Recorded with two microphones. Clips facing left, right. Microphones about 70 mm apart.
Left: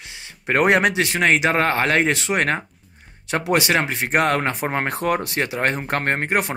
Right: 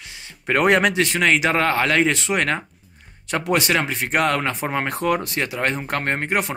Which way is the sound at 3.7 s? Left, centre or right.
Left.